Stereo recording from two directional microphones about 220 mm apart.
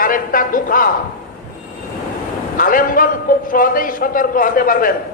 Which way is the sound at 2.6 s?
40° left (ahead or behind).